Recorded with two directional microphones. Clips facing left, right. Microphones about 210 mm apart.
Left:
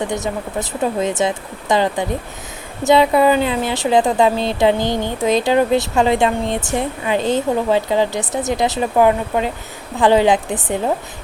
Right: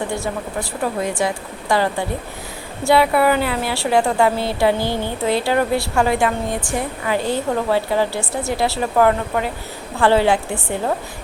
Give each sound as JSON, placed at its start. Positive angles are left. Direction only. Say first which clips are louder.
{"t": 0.1, "sound": "a woman's voice", "louder": "left 2 dB", "side_deg": 20}